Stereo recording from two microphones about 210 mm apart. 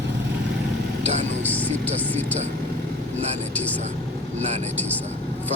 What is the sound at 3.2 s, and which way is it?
Speech, 30° right (ahead or behind).